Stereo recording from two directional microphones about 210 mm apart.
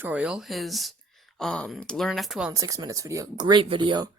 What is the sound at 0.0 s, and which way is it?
Speech, 5° right (ahead or behind).